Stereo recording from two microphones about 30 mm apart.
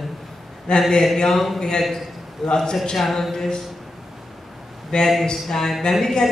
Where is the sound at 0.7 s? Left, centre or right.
Left.